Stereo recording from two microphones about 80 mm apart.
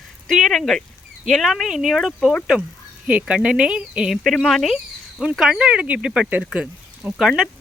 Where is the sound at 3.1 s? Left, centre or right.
Centre.